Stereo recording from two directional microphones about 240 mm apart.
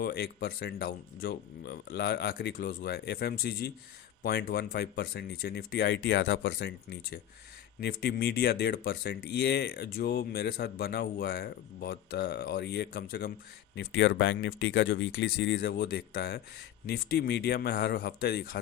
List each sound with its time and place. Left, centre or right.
0.0 s speech: left